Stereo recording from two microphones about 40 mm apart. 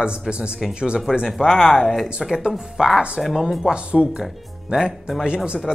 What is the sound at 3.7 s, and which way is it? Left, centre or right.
Speech, right.